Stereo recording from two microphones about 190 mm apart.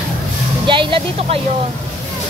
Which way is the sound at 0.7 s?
25° right (ahead or behind).